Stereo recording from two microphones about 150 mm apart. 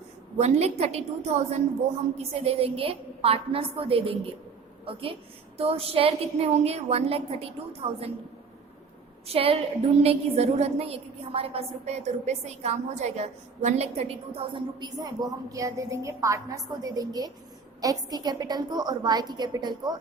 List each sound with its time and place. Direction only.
0.3 s a woman's voice: 45° right (ahead or behind)
9.2 s a woman's voice: 40° right (ahead or behind)